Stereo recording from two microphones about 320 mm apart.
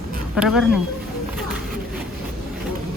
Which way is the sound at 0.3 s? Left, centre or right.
Centre.